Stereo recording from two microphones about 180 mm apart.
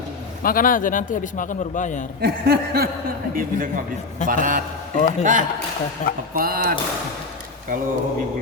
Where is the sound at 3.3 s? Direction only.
50° right (ahead or behind).